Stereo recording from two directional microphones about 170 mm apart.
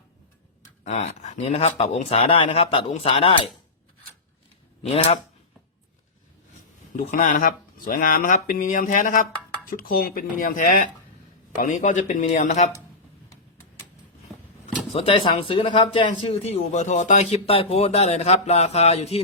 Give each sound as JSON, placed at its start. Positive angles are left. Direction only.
{"t": 0.9, "sound": "speech", "side_deg": 40}
{"t": 4.8, "sound": "speech", "side_deg": 35}
{"t": 6.9, "sound": "speech", "side_deg": 50}
{"t": 14.9, "sound": "speech", "side_deg": 35}